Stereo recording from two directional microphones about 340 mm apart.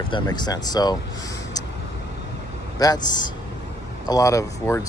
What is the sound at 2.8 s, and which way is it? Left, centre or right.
Speech, centre.